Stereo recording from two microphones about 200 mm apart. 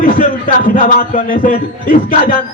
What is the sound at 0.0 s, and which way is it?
A man's voice, 45° left (ahead or behind).